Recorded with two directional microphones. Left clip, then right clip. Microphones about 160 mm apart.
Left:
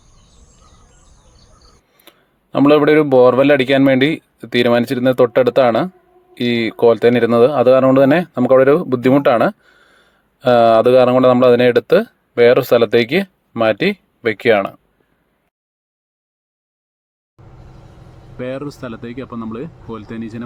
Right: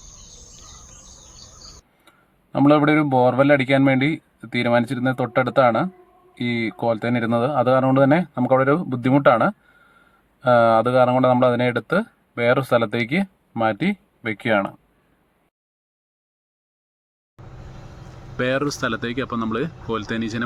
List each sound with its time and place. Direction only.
2.5 s speech: 25° left (ahead or behind)
17.4 s vehicle: centre (ahead or behind)
18.3 s speech: 5° right (ahead or behind)